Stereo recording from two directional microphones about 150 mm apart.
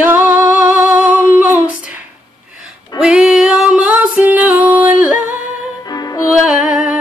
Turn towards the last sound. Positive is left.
turn(degrees=-10)  # may be behind; listen again after turning